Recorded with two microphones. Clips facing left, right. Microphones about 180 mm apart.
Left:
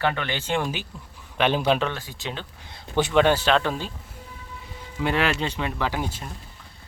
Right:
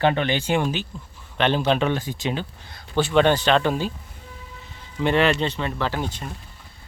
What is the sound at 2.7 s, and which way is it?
Speech, 20° left (ahead or behind).